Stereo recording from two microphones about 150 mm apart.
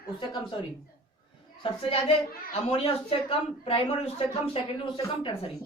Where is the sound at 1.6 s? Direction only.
40° left (ahead or behind).